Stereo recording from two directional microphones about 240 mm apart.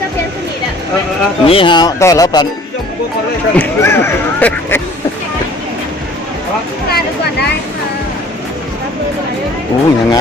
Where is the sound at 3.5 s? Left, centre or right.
Centre.